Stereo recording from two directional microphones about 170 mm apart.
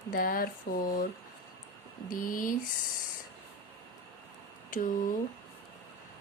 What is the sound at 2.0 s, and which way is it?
Speech, 55° left (ahead or behind).